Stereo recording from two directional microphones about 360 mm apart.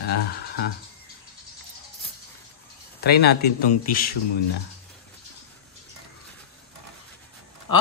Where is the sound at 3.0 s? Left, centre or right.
Left.